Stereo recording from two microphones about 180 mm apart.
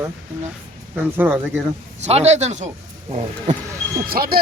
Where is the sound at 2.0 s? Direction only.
40° right (ahead or behind).